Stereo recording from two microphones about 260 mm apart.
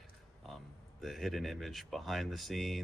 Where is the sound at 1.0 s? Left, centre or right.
Centre.